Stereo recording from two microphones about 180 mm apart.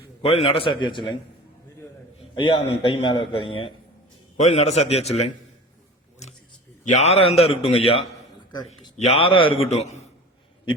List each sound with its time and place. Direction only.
0.2 s a man's voice: 35° left (ahead or behind)
2.3 s a man's voice: 25° left (ahead or behind)
6.8 s a man's voice: 40° left (ahead or behind)